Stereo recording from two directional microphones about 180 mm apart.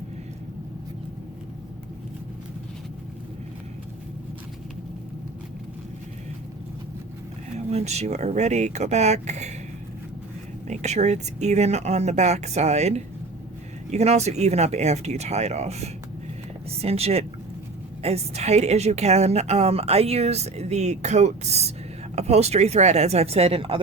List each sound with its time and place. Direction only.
7.7 s a woman's voice: 35° right (ahead or behind)
10.7 s a woman's voice: 40° right (ahead or behind)